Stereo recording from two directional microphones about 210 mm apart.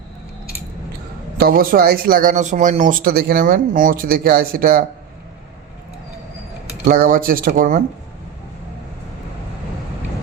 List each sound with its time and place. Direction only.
1.4 s speech: 45° right (ahead or behind)
6.8 s speech: 40° right (ahead or behind)